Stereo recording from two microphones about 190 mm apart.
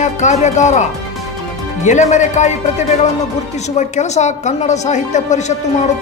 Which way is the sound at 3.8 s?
35° left (ahead or behind).